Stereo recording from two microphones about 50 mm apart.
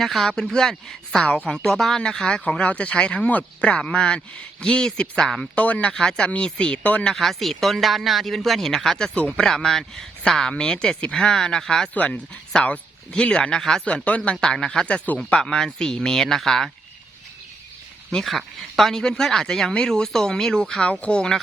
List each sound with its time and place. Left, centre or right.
0.0 s speech: centre
2.6 s speech: left
5.5 s speech: left
5.9 s speech: centre
7.0 s speech: centre
10.5 s speech: left
11.9 s speech: left; by 13.8 s centre
13.8 s speech: left; by 16.6 s centre
18.1 s speech: centre